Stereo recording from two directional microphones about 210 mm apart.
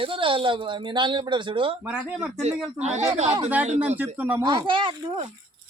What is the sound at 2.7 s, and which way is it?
Speech, 30° right (ahead or behind).